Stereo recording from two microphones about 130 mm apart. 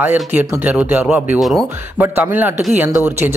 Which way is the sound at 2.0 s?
15° right (ahead or behind).